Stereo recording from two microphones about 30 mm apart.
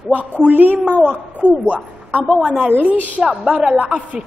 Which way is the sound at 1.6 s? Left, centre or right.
Right.